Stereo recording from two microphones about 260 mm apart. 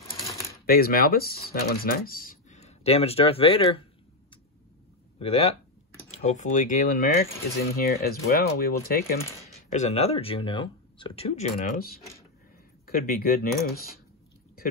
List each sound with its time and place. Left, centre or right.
0.1 s a sound: centre
0.7 s speech: left
5.2 s speech: left
9.7 s speech: left